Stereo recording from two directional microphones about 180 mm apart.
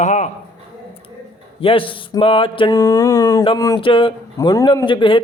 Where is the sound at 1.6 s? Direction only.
30° left (ahead or behind).